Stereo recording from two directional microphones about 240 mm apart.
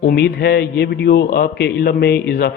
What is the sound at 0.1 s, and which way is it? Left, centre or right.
Speech, left.